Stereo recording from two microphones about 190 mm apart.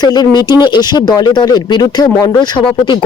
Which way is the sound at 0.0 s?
20° left (ahead or behind).